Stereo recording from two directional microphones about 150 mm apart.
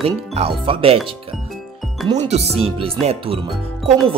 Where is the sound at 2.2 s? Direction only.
45° right (ahead or behind).